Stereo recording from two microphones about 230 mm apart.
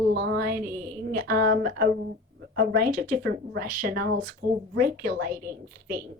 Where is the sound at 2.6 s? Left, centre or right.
Right.